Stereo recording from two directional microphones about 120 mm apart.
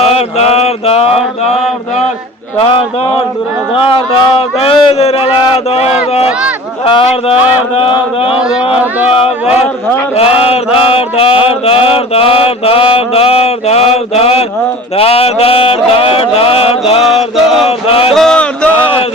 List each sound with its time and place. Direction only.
0.0 s mantra: 60° left (ahead or behind)
3.8 s mantra: 50° left (ahead or behind)
5.7 s speech: 60° left (ahead or behind)
6.8 s mantra: 50° left (ahead or behind)
8.7 s speech: 15° right (ahead or behind)
10.2 s mantra: 55° left (ahead or behind)
17.0 s mantra: centre (ahead or behind)
17.7 s chant: 50° left (ahead or behind)
18.1 s a sound: 5° left (ahead or behind)